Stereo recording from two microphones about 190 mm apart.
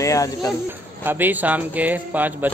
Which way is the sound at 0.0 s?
15° left (ahead or behind).